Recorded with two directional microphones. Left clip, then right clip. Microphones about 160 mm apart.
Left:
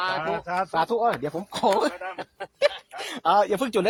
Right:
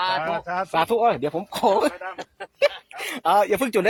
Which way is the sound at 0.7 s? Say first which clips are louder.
Right 5 dB; 35° right (ahead or behind).